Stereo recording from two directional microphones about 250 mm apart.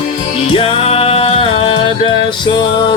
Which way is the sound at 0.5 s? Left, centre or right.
Left.